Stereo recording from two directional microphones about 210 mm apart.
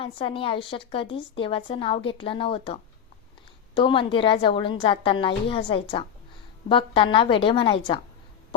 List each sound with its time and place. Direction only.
0.0 s a woman's voice: 25° left (ahead or behind)